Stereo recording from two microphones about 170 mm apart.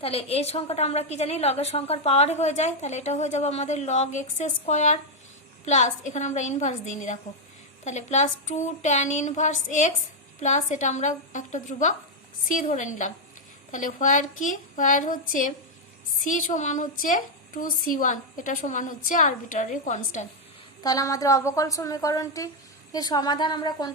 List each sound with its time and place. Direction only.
0.0 s a woman's voice: 35° left (ahead or behind)
20.8 s a woman's voice: 20° left (ahead or behind)